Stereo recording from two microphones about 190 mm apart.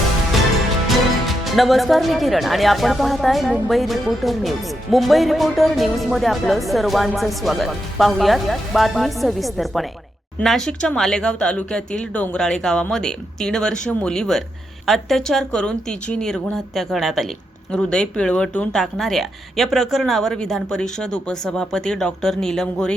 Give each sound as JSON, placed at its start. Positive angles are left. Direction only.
{"t": 1.5, "sound": "a woman's voice", "side_deg": 0}